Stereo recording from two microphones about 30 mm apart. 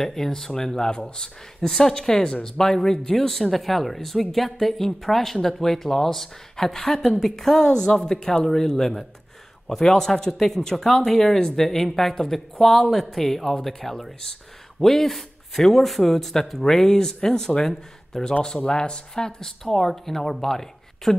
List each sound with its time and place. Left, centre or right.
0.0 s speech: centre
1.6 s speech: centre
17.6 s speech: centre
18.7 s speech: left
19.4 s speech: centre